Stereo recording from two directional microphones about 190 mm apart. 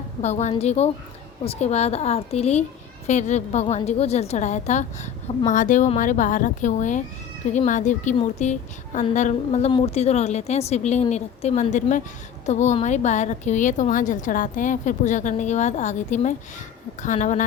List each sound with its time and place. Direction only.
0.2 s a woman's voice: 35° left (ahead or behind)